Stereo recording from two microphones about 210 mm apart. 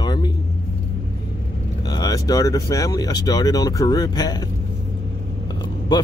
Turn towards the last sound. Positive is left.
turn(degrees=20)  # may be behind; listen again after turning